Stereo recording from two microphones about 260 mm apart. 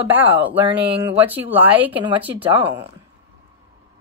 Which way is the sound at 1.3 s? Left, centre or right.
Centre.